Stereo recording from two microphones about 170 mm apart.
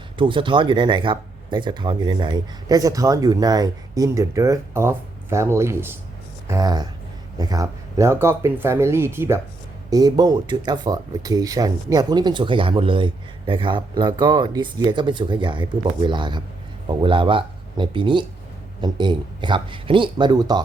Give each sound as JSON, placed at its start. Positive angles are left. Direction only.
{"t": 0.2, "sound": "speech", "side_deg": -30}